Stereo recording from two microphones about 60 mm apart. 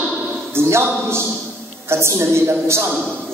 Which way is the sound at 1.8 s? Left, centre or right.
Right.